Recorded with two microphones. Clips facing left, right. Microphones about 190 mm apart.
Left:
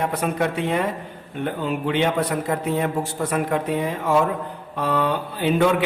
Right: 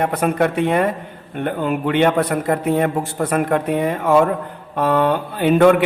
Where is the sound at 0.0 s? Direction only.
55° right (ahead or behind).